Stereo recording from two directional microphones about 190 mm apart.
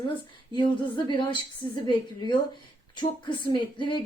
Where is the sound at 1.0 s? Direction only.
25° left (ahead or behind).